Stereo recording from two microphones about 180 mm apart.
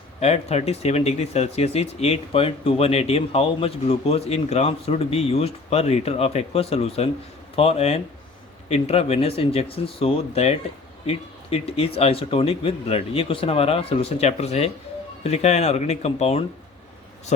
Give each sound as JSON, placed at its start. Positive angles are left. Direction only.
{"t": 0.2, "sound": "speech", "side_deg": 35}